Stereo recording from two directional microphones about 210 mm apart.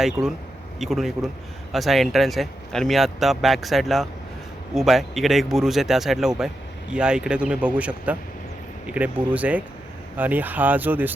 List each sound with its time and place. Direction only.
0.0 s speech: centre (ahead or behind)